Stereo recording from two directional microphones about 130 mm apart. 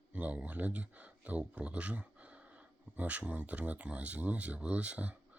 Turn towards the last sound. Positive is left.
turn(degrees=-10)  # may be behind; listen again after turning